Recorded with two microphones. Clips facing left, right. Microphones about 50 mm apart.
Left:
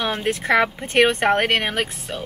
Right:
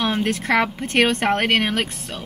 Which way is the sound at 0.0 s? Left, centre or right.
Centre.